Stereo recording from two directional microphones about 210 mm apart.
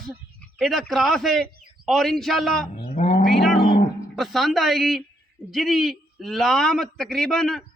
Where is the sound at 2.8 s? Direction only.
30° left (ahead or behind).